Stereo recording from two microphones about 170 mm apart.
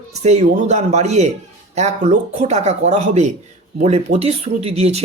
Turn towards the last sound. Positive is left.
turn(degrees=-40)  # may be behind; listen again after turning